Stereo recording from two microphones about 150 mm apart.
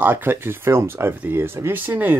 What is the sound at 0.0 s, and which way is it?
Speech, 10° right (ahead or behind).